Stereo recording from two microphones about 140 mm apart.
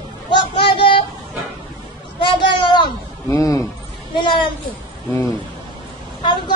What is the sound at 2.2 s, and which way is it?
Speech, 35° left (ahead or behind).